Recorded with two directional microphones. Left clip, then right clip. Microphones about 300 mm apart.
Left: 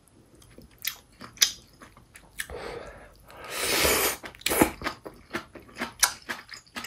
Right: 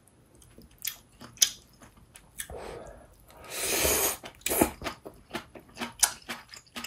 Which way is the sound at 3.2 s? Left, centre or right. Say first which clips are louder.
Left 4 dB; centre.